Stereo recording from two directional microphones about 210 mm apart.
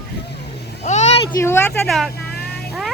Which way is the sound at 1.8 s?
Centre (ahead or behind).